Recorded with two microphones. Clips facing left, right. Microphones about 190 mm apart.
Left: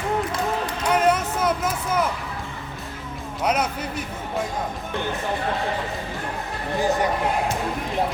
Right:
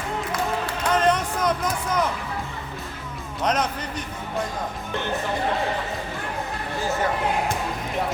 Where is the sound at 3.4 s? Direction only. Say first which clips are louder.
Left 1 dB; 10° left (ahead or behind).